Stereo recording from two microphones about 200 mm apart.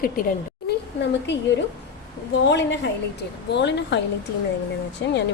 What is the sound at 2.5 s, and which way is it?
Speech, 60° left (ahead or behind).